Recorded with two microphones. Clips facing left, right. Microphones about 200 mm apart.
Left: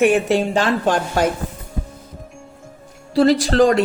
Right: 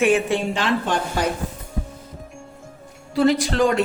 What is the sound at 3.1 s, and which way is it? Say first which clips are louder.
Speech: left 4 dB; 35° left (ahead or behind).